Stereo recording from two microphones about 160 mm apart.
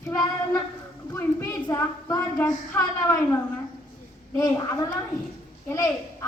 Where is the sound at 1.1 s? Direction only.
20° left (ahead or behind).